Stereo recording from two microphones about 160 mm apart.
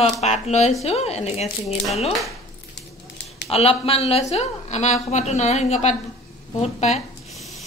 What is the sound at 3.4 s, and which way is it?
A woman's voice, 40° left (ahead or behind).